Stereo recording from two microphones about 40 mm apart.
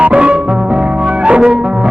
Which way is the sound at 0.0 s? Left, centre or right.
Right.